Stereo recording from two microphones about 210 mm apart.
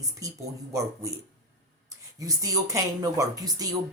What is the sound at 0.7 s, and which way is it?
Speech, 15° right (ahead or behind).